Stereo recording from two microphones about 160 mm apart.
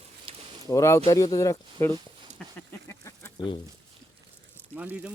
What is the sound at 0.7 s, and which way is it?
Speech, 20° left (ahead or behind).